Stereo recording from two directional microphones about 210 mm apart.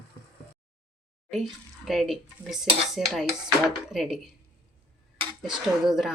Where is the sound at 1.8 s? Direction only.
Centre (ahead or behind).